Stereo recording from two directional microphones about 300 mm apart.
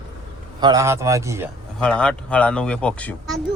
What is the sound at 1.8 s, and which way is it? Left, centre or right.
Speech, centre.